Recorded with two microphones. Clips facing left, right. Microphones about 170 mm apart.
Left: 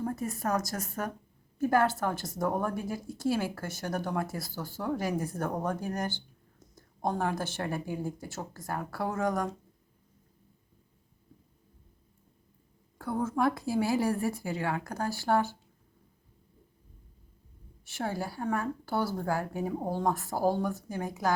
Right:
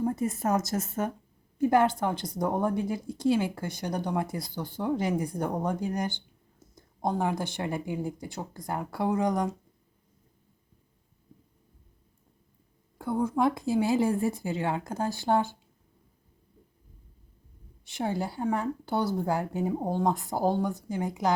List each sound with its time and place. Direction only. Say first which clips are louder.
0.0 s speech: right 4 dB; 20° right (ahead or behind)
13.0 s speech: right 3 dB; 15° right (ahead or behind)
17.8 s speech: right 3 dB; 20° right (ahead or behind)